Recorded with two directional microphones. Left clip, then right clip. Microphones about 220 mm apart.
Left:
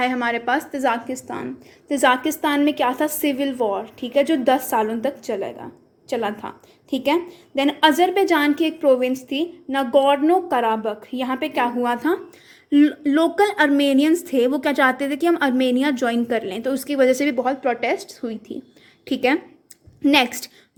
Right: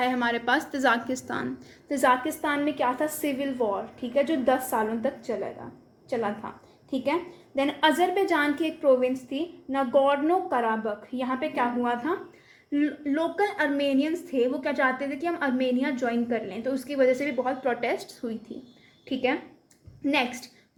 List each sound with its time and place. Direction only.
0.0 s a woman's voice: 25° left (ahead or behind); by 1.5 s 10° left (ahead or behind)
1.9 s a woman's voice: 30° left (ahead or behind)
19.0 s a woman's voice: 50° left (ahead or behind)